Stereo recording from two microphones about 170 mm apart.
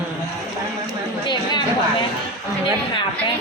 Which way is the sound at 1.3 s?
25° left (ahead or behind).